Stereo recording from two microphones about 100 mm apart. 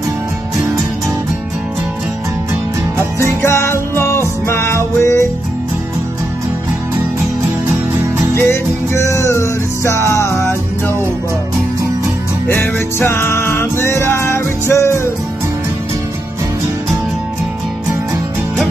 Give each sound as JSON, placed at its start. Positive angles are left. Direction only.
{"t": 3.2, "sound": "music", "side_deg": 25}
{"t": 8.4, "sound": "music", "side_deg": 25}
{"t": 12.4, "sound": "music", "side_deg": 20}